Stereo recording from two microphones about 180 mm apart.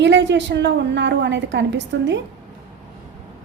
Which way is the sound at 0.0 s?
80° right.